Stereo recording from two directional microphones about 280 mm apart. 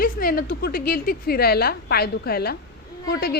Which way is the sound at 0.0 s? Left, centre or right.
Left.